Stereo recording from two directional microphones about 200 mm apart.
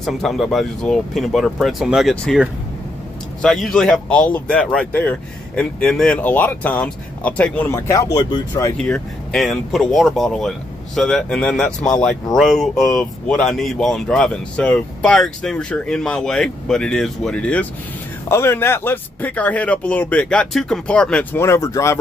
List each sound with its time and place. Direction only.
0.0 s speech: centre (ahead or behind); by 8.9 s 15° left (ahead or behind)
8.9 s speech: centre (ahead or behind)